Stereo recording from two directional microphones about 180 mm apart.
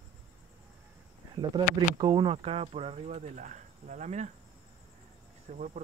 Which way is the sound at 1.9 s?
25° right (ahead or behind).